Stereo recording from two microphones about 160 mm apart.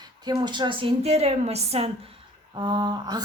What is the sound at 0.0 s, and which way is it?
A woman's voice, 25° right (ahead or behind).